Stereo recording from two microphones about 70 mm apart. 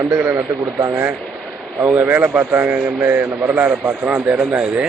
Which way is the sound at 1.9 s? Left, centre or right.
Right.